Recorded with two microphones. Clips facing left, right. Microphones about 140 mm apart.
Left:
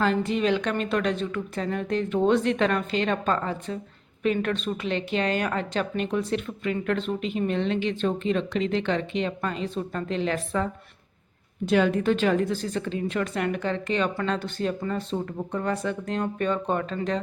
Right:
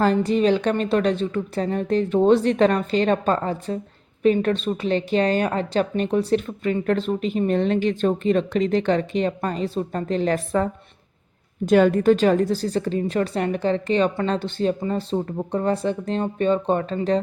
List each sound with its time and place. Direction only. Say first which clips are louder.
0.0 s speech: right 5 dB; 40° right (ahead or behind)